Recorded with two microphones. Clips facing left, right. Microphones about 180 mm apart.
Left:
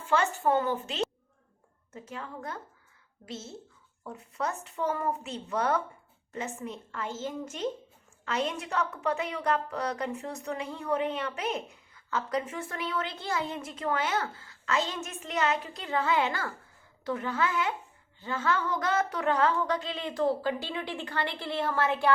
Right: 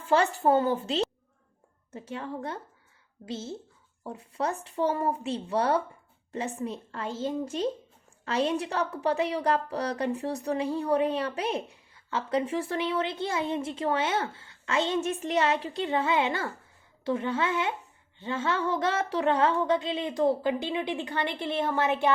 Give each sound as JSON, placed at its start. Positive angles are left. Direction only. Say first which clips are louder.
{"t": 0.0, "sound": "a woman's voice", "louder": "right 3 dB", "side_deg": -35}
{"t": 17.0, "sound": "music", "louder": "right 2 dB", "side_deg": -25}